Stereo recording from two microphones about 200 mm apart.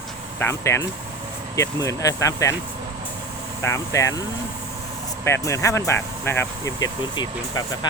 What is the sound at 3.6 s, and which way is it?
Speech, 15° left (ahead or behind).